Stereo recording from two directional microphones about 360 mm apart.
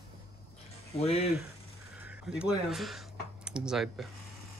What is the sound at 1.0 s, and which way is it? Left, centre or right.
Speech, centre.